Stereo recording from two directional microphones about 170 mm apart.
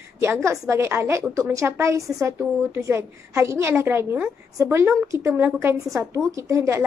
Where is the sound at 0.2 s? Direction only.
15° right (ahead or behind).